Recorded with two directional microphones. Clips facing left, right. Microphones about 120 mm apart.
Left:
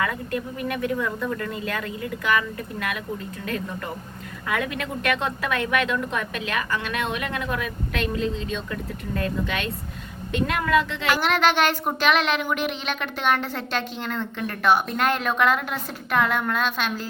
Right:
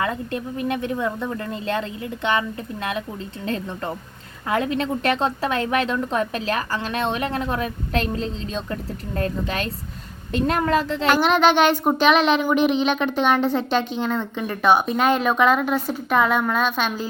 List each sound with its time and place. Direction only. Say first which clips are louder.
0.0 s a woman's voice: right 1 dB; 25° right (ahead or behind)
11.1 s a woman's voice: right 4 dB; 20° right (ahead or behind)